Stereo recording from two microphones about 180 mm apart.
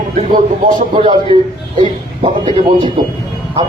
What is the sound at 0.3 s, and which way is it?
Speech, 45° right (ahead or behind).